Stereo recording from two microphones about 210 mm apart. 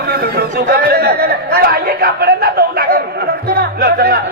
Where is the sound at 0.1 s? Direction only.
45° right (ahead or behind).